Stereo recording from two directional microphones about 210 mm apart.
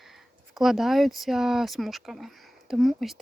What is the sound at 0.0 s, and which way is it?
Speech, centre (ahead or behind).